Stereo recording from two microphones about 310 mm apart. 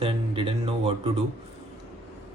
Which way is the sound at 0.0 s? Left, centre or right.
Centre.